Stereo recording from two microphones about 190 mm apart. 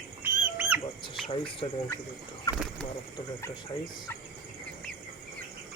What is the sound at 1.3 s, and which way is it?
Speech, 25° left (ahead or behind).